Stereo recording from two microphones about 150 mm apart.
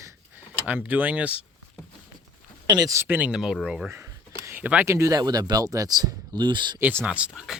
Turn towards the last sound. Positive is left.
turn(degrees=-5)  # may be behind; listen again after turning